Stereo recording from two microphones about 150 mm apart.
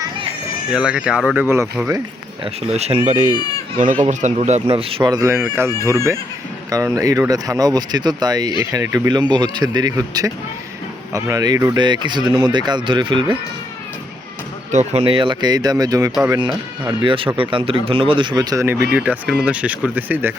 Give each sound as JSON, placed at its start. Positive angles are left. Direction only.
{"t": 0.7, "sound": "speech", "side_deg": -5}
{"t": 1.5, "sound": "speech", "side_deg": -15}
{"t": 2.4, "sound": "speech", "side_deg": -45}
{"t": 5.3, "sound": "speech", "side_deg": -15}
{"t": 14.7, "sound": "speech", "side_deg": -50}
{"t": 15.0, "sound": "speech", "side_deg": -35}
{"t": 18.6, "sound": "speech", "side_deg": -10}